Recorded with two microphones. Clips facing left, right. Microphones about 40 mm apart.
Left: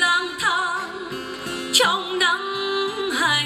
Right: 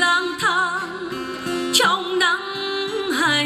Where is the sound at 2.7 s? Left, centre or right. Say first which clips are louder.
Right 2 dB; left.